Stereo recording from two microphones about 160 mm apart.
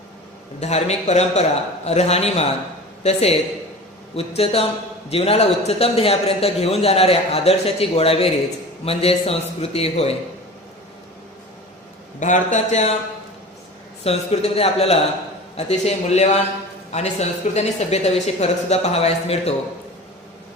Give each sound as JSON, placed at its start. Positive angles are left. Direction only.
{"t": 0.6, "sound": "a man's voice", "side_deg": 45}
{"t": 12.2, "sound": "speech", "side_deg": 50}
{"t": 14.0, "sound": "a man's voice", "side_deg": 40}